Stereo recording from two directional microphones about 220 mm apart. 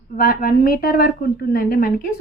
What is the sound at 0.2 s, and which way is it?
A woman's voice, 40° left (ahead or behind).